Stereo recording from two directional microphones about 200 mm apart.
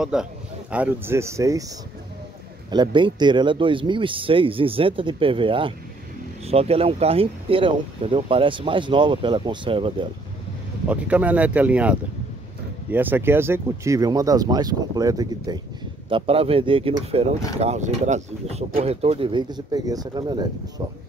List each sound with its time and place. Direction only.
0.0 s speech: 5° right (ahead or behind)
2.7 s speech: 25° right (ahead or behind)
10.9 s speech: 5° right (ahead or behind)